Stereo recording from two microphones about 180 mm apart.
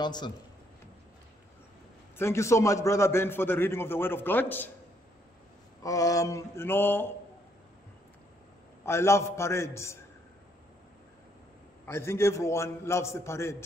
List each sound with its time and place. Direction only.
0.0 s a man's voice: 25° left (ahead or behind)
2.1 s a man's voice: 15° left (ahead or behind)
5.8 s a man's voice: 20° left (ahead or behind)
8.8 s a man's voice: 15° left (ahead or behind)
11.8 s a man's voice: 15° left (ahead or behind)